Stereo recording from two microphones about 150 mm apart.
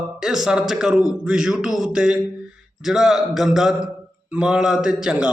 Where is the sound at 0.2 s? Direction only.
5° right (ahead or behind).